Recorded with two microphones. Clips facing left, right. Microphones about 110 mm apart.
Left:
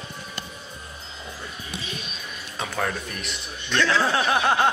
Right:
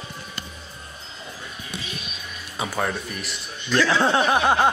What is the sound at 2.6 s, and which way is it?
A man's voice, 10° right (ahead or behind).